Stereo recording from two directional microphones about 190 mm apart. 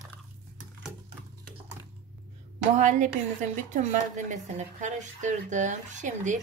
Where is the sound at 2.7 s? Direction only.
40° right (ahead or behind).